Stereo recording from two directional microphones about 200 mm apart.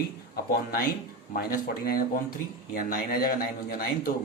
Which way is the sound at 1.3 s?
45° left (ahead or behind).